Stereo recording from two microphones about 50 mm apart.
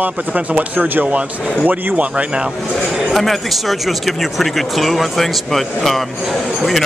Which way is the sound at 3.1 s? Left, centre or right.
Centre.